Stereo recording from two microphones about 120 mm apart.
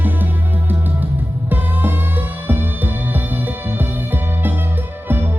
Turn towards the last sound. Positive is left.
turn(degrees=-15)  # may be behind; listen again after turning